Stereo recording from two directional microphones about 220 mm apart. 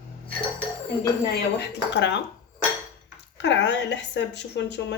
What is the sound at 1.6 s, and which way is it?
Speech, 55° left (ahead or behind).